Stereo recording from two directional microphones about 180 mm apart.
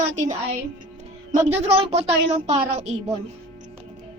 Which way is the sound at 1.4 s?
35° right (ahead or behind).